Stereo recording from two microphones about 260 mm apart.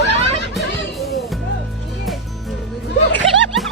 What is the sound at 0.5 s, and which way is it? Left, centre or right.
Music, centre.